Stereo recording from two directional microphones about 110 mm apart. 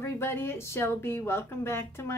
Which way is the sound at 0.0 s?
20° left (ahead or behind).